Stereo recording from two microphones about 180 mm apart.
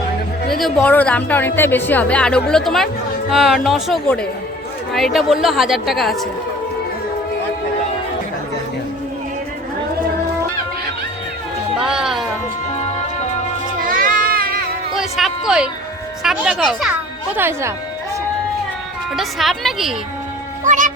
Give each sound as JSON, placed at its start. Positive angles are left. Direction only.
{"t": 0.6, "sound": "a woman's voice", "side_deg": 10}
{"t": 11.8, "sound": "speech", "side_deg": -5}
{"t": 13.8, "sound": "a sound", "side_deg": -50}
{"t": 14.9, "sound": "a sound", "side_deg": 0}
{"t": 16.2, "sound": "speech", "side_deg": -5}
{"t": 19.1, "sound": "speech", "side_deg": 0}
{"t": 20.7, "sound": "speech", "side_deg": -45}